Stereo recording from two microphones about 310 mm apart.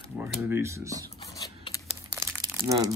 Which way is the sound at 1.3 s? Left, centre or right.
Centre.